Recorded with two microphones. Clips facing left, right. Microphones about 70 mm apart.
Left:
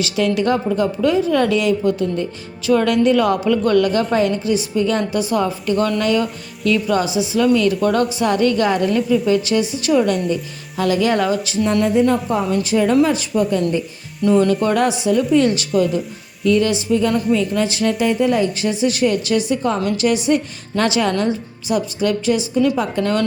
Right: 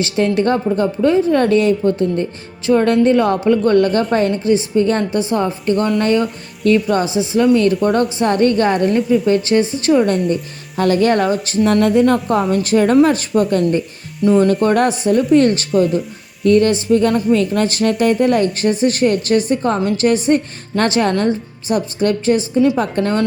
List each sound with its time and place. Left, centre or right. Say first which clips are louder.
0.0 s a woman's voice: right 2 dB; right
9.4 s a woman's voice: right 4 dB; right
10.2 s speech: right 2 dB; right
14.2 s speech: right 2 dB; centre
14.4 s a woman's voice: right 3 dB; right